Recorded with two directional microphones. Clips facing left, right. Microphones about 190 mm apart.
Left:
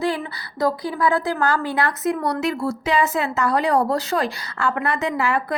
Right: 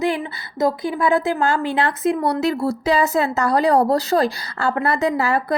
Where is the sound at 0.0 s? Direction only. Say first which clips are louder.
Right 2 dB; 20° right (ahead or behind).